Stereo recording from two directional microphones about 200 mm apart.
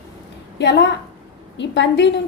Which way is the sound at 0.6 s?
60° left (ahead or behind).